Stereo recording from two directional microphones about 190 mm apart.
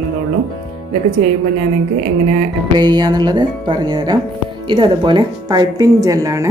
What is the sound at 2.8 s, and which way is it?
Speech, 20° right (ahead or behind).